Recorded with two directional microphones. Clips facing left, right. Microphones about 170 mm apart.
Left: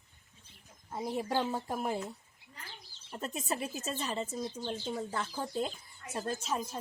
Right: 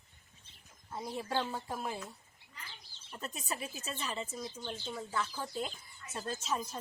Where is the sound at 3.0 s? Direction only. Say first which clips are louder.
Left 4 dB; 25° left (ahead or behind).